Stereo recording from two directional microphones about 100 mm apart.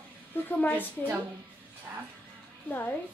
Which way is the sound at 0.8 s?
15° right (ahead or behind).